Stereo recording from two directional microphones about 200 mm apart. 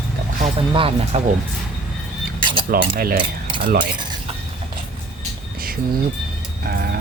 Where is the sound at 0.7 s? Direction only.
25° right (ahead or behind).